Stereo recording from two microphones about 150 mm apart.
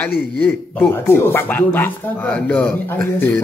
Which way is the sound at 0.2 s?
10° left (ahead or behind).